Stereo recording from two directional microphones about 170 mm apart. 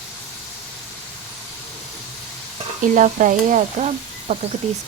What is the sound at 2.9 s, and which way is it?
Speech, 50° right (ahead or behind).